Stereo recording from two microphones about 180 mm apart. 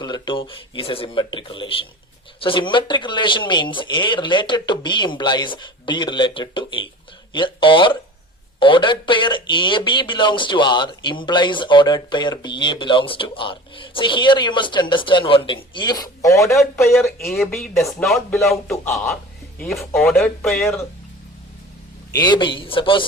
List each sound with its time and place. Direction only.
0.0 s speech: 25° left (ahead or behind)
16.8 s speech: centre (ahead or behind)
22.1 s speech: 25° left (ahead or behind)